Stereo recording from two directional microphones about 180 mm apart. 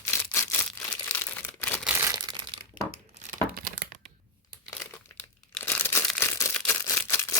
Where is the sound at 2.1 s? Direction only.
25° right (ahead or behind).